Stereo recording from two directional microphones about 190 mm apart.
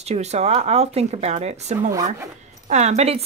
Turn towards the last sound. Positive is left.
turn(degrees=-35)  # may be behind; listen again after turning